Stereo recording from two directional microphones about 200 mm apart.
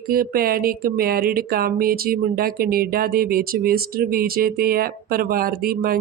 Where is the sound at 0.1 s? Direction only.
45° right (ahead or behind).